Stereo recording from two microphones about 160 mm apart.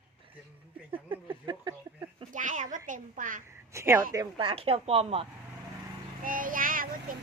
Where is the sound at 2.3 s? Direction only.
50° right (ahead or behind).